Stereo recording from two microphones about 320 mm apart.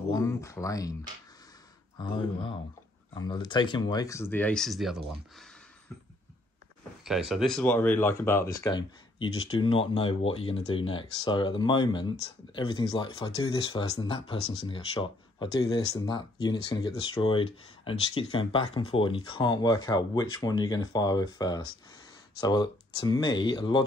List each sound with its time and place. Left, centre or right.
0.1 s speech: centre
2.0 s speech: centre
7.1 s speech: centre